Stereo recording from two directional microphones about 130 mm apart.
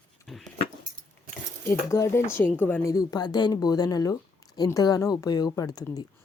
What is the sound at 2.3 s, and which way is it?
Speech, 15° left (ahead or behind).